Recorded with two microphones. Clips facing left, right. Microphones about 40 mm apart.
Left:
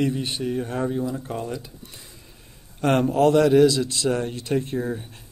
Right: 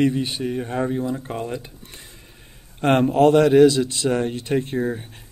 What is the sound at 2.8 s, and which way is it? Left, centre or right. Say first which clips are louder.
A man's voice: right 3 dB; right.